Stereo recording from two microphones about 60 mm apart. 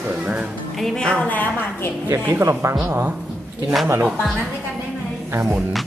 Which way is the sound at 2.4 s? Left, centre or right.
Right.